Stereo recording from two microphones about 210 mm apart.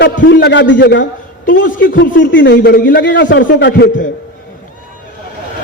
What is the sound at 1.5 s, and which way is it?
Speech, 40° left (ahead or behind).